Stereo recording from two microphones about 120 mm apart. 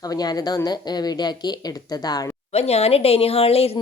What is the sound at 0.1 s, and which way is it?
Speech, 35° left (ahead or behind).